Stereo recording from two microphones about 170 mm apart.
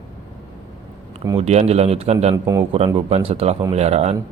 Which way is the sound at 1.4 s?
40° right (ahead or behind).